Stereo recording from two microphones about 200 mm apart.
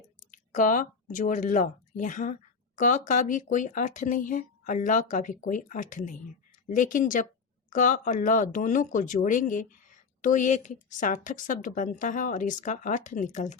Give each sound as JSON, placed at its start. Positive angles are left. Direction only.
{"t": 0.3, "sound": "speech", "side_deg": 40}